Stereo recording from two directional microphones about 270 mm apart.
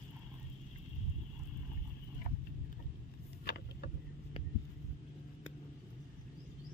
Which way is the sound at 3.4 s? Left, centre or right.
Left.